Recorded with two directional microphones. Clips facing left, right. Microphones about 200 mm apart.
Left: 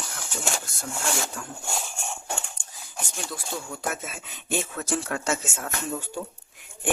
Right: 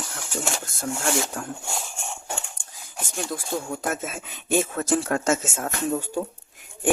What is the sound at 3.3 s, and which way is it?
Speech, 45° right (ahead or behind).